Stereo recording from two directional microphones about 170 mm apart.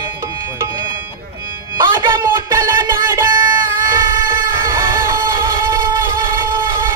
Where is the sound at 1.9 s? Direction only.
15° right (ahead or behind).